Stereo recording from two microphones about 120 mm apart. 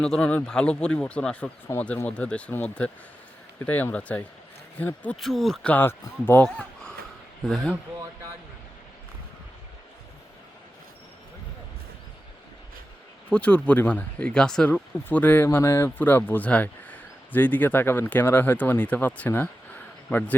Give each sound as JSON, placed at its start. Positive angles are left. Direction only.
{"t": 0.0, "sound": "speech", "side_deg": 5}
{"t": 5.2, "sound": "speech", "side_deg": 0}
{"t": 5.7, "sound": "speech", "side_deg": 20}
{"t": 13.3, "sound": "speech", "side_deg": 10}